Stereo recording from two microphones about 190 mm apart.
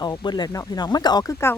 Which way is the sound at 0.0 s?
20° left (ahead or behind).